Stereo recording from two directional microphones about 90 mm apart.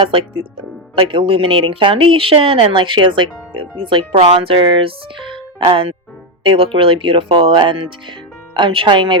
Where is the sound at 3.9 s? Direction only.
75° right (ahead or behind).